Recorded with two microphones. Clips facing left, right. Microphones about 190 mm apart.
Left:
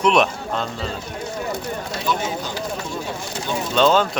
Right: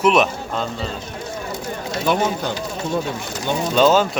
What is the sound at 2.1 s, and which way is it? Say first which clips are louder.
Speech: right 5 dB; 60° right (ahead or behind).